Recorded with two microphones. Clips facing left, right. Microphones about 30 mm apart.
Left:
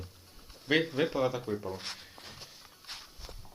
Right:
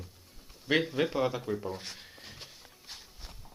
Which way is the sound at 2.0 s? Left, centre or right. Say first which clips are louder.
Even; centre.